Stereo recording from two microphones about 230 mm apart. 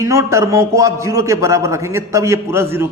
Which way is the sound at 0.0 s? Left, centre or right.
Centre.